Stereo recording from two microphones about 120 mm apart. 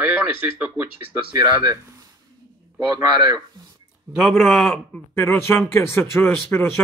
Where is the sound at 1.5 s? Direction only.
25° right (ahead or behind).